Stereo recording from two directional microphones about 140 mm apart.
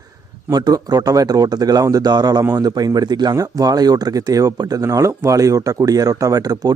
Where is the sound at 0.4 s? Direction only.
25° right (ahead or behind).